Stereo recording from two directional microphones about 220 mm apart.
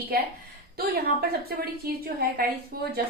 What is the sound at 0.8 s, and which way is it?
A woman's voice, 45° right (ahead or behind).